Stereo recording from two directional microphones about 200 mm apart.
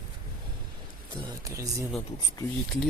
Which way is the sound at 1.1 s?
15° right (ahead or behind).